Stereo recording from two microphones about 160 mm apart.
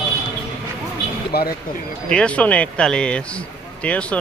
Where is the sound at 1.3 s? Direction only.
80° left.